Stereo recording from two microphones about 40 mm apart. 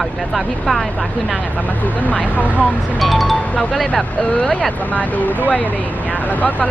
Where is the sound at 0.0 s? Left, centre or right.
Centre.